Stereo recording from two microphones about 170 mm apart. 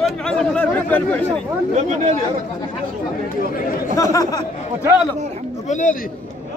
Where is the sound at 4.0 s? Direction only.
20° left (ahead or behind).